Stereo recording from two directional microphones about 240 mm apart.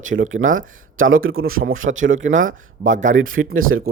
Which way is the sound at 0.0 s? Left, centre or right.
Right.